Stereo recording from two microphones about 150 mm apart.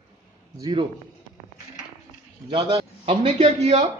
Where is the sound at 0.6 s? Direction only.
30° right (ahead or behind).